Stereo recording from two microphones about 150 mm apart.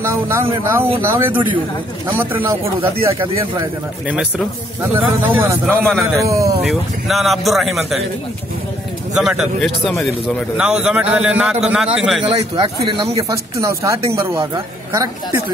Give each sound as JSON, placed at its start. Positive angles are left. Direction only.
{"t": 0.0, "sound": "speech", "side_deg": -15}
{"t": 4.9, "sound": "speech", "side_deg": -20}
{"t": 5.7, "sound": "speech", "side_deg": 0}
{"t": 6.2, "sound": "speech", "side_deg": -20}
{"t": 6.6, "sound": "speech", "side_deg": 0}
{"t": 9.1, "sound": "speech", "side_deg": -5}
{"t": 12.6, "sound": "speech", "side_deg": -35}
{"t": 13.1, "sound": "speech", "side_deg": -20}